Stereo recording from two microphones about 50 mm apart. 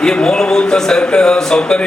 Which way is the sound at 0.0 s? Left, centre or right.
Centre.